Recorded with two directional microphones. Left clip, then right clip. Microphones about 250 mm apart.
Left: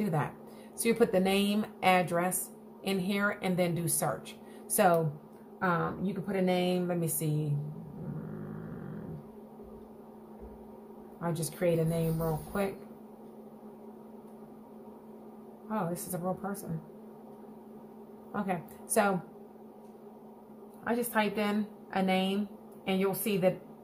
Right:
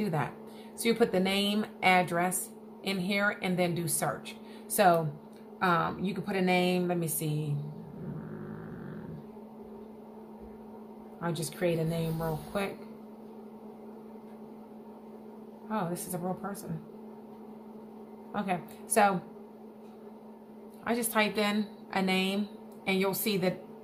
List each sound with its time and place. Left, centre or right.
0.0 s a woman's voice: centre
11.1 s speech: centre
15.7 s speech: centre
18.3 s speech: centre
20.8 s a woman's voice: centre